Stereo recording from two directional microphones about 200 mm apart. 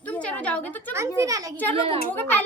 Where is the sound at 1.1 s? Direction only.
15° right (ahead or behind).